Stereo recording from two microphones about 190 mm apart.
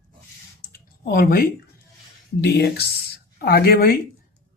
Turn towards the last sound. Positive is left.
turn(degrees=55)  # may be behind; listen again after turning